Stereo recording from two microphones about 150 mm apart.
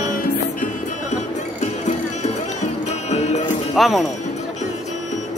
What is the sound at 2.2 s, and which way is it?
Music, 50° left (ahead or behind).